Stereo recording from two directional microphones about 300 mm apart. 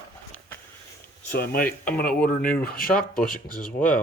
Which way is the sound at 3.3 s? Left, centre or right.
Left.